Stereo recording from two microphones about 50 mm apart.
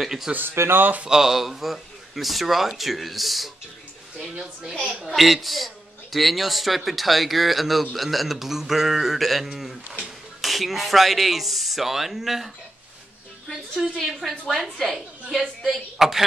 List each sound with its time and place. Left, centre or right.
0.0 s a woman's voice: centre
0.6 s speech: right
1.0 s a woman's voice: centre
13.5 s a woman's voice: centre